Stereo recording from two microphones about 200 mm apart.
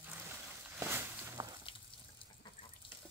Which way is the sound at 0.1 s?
10° right (ahead or behind).